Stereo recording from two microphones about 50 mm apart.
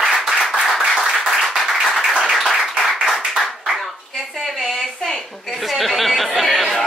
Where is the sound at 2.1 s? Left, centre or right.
Centre.